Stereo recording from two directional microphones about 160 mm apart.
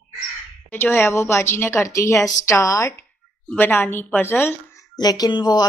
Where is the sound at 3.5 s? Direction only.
10° left (ahead or behind).